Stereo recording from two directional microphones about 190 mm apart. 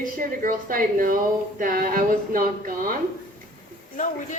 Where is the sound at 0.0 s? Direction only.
45° right (ahead or behind).